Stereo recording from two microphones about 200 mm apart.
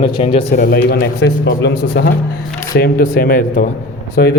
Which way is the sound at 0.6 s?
50° left (ahead or behind).